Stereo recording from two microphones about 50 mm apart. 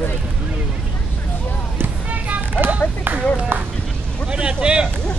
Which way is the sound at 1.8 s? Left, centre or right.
Right.